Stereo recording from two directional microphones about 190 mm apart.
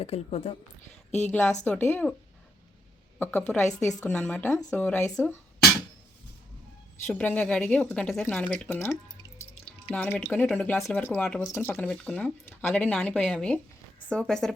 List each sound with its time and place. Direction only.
0.0 s a woman's voice: 30° left (ahead or behind)
1.3 s speech: 10° left (ahead or behind)
3.5 s speech: 15° left (ahead or behind)
7.1 s speech: 10° left (ahead or behind)